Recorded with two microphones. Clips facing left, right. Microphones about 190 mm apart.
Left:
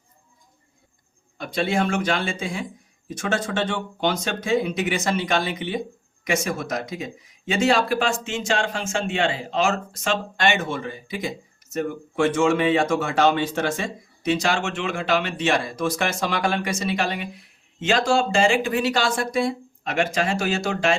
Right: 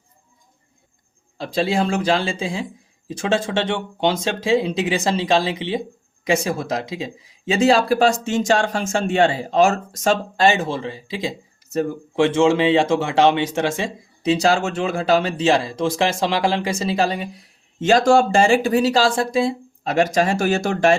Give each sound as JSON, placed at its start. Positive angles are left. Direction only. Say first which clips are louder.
{"t": 1.4, "sound": "speech", "louder": "right 3 dB", "side_deg": -30}
{"t": 17.7, "sound": "speech", "louder": "right 6 dB", "side_deg": -45}